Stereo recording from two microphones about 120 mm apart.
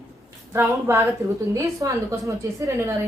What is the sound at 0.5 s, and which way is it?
A woman's voice, 20° right (ahead or behind).